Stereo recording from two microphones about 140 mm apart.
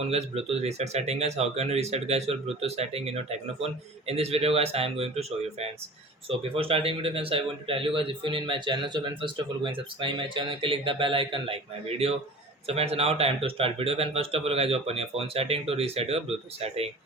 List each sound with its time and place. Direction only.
0.1 s a man's voice: 45° right (ahead or behind)